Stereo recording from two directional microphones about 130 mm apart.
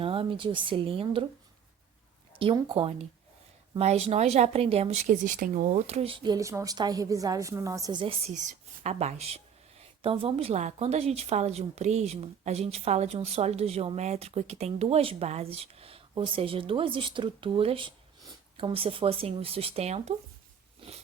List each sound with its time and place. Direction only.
0.0 s speech: 45° right (ahead or behind)
2.3 s speech: 40° right (ahead or behind)
6.3 s a woman's voice: 25° right (ahead or behind)
7.9 s speech: 45° right (ahead or behind)
8.4 s speech: 65° right (ahead or behind)
20.8 s a sound: 45° right (ahead or behind)